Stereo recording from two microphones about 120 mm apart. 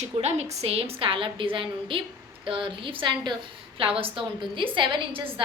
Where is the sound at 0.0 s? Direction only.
65° right (ahead or behind).